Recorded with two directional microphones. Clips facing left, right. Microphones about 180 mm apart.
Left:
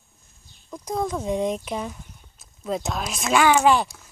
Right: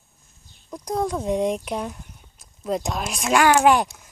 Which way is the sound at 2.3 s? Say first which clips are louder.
Right 2 dB; centre (ahead or behind).